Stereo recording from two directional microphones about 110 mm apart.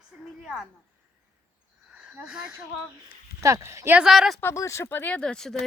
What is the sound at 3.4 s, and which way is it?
Speech, 30° right (ahead or behind).